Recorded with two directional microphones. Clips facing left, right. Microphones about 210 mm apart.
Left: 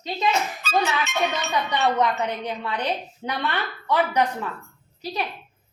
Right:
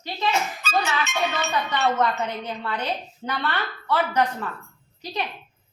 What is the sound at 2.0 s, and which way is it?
Speech, 15° left (ahead or behind).